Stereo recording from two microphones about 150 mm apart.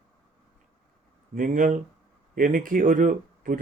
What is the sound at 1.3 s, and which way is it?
Speech, 65° right (ahead or behind).